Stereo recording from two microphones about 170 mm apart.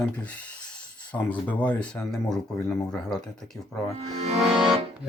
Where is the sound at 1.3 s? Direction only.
10° left (ahead or behind).